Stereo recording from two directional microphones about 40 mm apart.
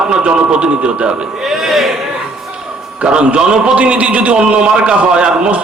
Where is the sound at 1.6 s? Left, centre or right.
Centre.